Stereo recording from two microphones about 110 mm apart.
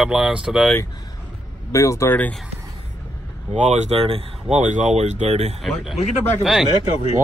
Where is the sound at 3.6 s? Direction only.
90° right.